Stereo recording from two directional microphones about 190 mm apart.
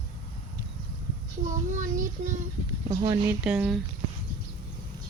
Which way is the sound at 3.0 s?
25° right (ahead or behind).